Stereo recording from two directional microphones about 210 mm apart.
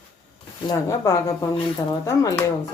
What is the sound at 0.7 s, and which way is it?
Speech, 15° left (ahead or behind).